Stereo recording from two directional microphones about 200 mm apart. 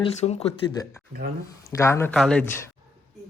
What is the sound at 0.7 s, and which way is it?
A woman's voice, 15° left (ahead or behind).